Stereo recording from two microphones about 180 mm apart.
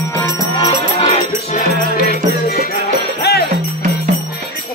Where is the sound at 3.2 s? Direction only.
65° left (ahead or behind).